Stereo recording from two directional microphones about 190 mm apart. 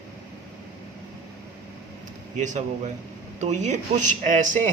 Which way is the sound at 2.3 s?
40° right (ahead or behind).